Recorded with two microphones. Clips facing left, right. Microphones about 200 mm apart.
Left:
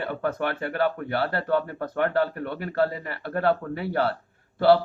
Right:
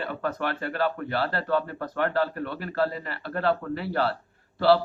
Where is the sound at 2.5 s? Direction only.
55° left (ahead or behind).